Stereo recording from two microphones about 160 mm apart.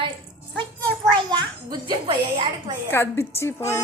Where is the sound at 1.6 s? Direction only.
30° right (ahead or behind).